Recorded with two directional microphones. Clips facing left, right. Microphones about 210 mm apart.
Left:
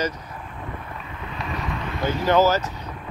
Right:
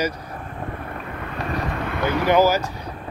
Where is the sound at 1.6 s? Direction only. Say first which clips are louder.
Even; 55° right (ahead or behind).